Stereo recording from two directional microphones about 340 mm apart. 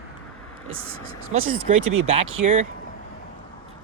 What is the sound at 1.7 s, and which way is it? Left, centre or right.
Speech, right.